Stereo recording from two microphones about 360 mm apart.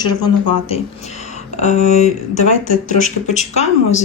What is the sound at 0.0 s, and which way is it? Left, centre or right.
Speech, centre.